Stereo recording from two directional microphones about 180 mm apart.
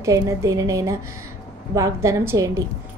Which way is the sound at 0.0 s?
15° right (ahead or behind).